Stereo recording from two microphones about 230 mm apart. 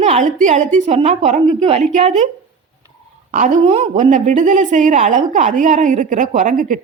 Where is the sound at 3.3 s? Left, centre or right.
Right.